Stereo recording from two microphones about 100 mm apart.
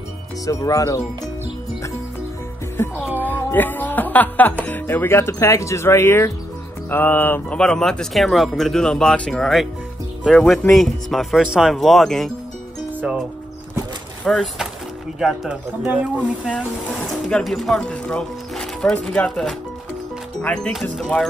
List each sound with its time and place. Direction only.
0.5 s speech: 35° left (ahead or behind)
2.8 s music: 25° left (ahead or behind)
3.2 s speech: 20° left (ahead or behind)
6.9 s music: 20° left (ahead or behind)
7.5 s speech: 5° left (ahead or behind)
14.2 s speech: centre (ahead or behind)
17.4 s speech: centre (ahead or behind)
20.7 s speech: centre (ahead or behind)